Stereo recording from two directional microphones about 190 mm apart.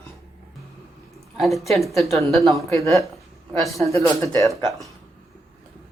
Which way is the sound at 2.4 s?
15° left (ahead or behind).